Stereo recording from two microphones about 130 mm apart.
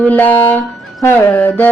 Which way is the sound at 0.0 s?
15° left (ahead or behind).